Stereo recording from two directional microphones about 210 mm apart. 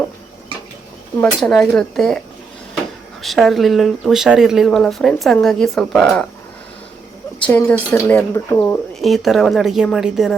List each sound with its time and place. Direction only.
1.2 s speech: centre (ahead or behind)
3.2 s speech: centre (ahead or behind)
7.4 s speech: 5° left (ahead or behind)